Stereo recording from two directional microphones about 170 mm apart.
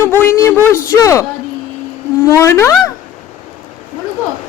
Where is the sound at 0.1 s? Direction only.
15° left (ahead or behind).